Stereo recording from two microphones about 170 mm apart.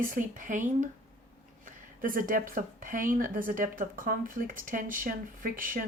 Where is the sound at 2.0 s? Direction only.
55° right (ahead or behind).